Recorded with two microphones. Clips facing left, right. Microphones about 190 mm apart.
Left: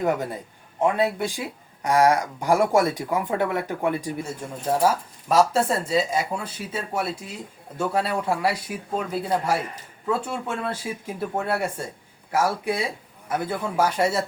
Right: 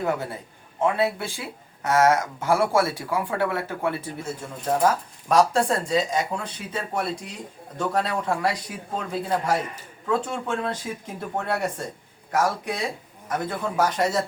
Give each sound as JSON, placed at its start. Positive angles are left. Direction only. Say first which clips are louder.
{"t": 0.0, "sound": "speech", "louder": "left 2 dB", "side_deg": 15}